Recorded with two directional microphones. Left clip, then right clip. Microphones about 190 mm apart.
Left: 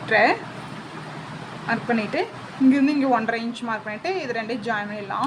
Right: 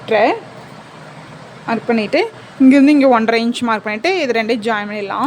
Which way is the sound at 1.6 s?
45° right (ahead or behind).